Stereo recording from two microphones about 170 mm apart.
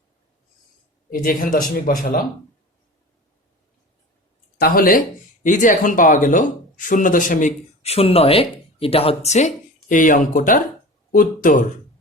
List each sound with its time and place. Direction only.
1.1 s speech: 60° left (ahead or behind)
4.5 s speech: 60° left (ahead or behind)